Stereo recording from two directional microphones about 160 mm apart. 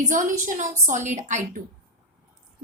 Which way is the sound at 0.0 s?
55° right (ahead or behind).